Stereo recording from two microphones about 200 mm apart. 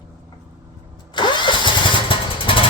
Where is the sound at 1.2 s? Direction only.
20° left (ahead or behind).